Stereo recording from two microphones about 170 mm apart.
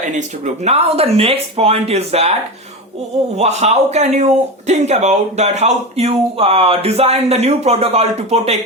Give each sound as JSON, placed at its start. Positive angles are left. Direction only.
{"t": 0.2, "sound": "speech", "side_deg": -40}
{"t": 3.3, "sound": "speech", "side_deg": -40}